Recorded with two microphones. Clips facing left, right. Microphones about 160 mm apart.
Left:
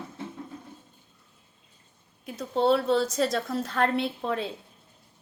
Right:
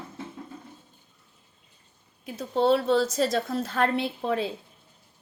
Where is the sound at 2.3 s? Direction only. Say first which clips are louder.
Right 1 dB; centre (ahead or behind).